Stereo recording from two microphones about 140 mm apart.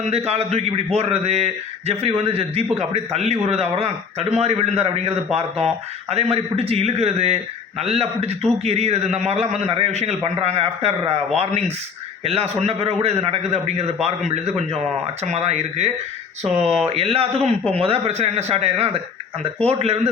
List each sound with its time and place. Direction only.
0.0 s a man's voice: 50° right (ahead or behind)
12.2 s a man's voice: 45° right (ahead or behind)
15.2 s a man's voice: 50° right (ahead or behind)